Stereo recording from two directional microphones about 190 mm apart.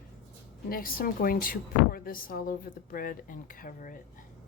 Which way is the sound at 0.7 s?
50° left (ahead or behind).